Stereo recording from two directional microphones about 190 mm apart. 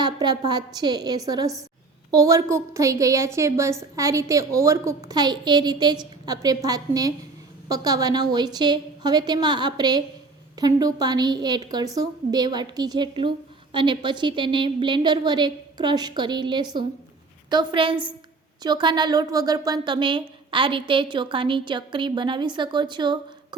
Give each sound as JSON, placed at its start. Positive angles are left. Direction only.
{"t": 0.0, "sound": "a woman's voice", "side_deg": -20}